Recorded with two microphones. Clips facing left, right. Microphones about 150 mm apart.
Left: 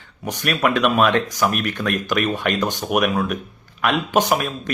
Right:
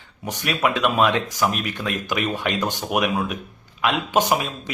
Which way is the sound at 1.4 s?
65° left (ahead or behind).